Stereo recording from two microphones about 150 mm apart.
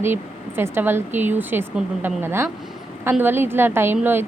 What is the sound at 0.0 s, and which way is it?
Speech, 15° right (ahead or behind).